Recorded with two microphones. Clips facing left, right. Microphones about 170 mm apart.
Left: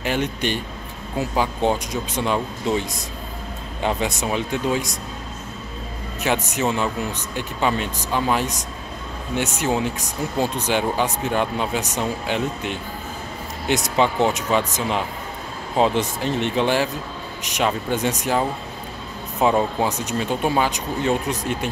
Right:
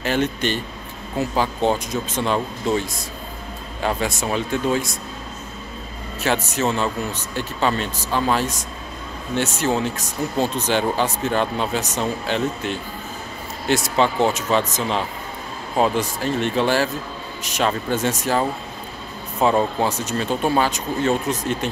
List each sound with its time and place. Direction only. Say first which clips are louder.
0.0 s speech: right 2 dB; 15° left (ahead or behind)
3.8 s speech: even; 20° left (ahead or behind)
6.2 s speech: right 1 dB; 15° left (ahead or behind)
19.5 s speech: right 1 dB; 10° left (ahead or behind)